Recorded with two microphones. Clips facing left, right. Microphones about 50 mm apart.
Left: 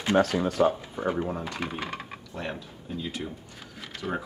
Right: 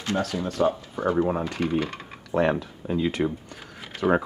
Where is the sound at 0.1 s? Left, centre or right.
Left.